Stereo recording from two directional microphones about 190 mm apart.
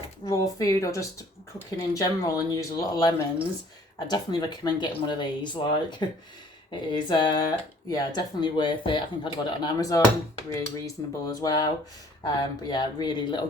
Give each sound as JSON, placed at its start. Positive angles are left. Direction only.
{"t": 0.3, "sound": "speech", "side_deg": 15}